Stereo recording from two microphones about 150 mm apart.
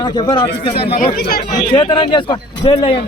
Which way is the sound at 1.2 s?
90° left.